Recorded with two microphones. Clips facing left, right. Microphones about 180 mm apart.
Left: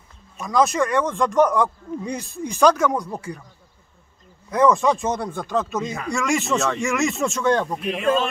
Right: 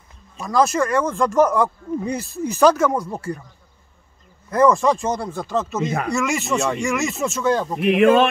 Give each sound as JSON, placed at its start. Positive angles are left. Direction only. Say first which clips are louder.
{"t": 0.4, "sound": "speech", "louder": "right 1 dB", "side_deg": 0}
{"t": 4.5, "sound": "speech", "louder": "right 1 dB", "side_deg": 0}
{"t": 8.0, "sound": "a sound", "louder": "right 7 dB", "side_deg": -70}